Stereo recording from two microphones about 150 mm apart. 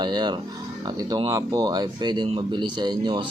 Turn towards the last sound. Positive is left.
turn(degrees=-30)  # may be behind; listen again after turning